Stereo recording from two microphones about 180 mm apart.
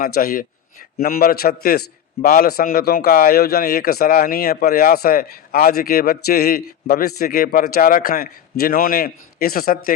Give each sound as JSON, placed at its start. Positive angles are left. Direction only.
{"t": 0.0, "sound": "speech", "side_deg": 55}